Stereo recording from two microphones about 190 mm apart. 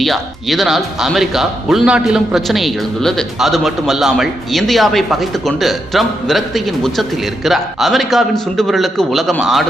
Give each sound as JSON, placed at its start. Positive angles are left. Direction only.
{"t": 0.0, "sound": "speech", "side_deg": 0}